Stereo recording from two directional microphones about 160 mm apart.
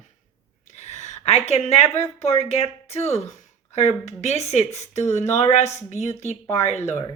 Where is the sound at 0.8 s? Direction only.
45° left (ahead or behind).